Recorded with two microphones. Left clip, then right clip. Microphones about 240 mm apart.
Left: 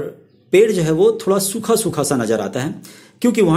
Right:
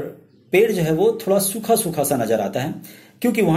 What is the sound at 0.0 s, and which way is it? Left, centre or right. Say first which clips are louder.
A man's voice: left 3 dB; left.